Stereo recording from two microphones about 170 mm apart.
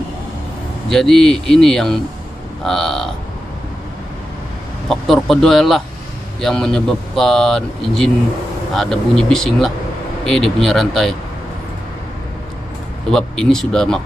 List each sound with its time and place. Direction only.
0.8 s speech: centre (ahead or behind)
4.8 s speech: centre (ahead or behind)
13.1 s speech: 5° left (ahead or behind)